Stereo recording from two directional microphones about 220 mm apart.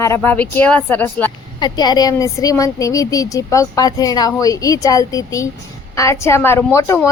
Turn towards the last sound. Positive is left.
turn(degrees=10)  # may be behind; listen again after turning